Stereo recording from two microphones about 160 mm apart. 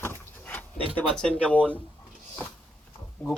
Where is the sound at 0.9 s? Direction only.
5° left (ahead or behind).